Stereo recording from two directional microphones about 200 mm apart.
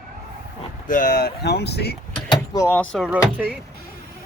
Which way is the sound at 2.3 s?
15° left (ahead or behind).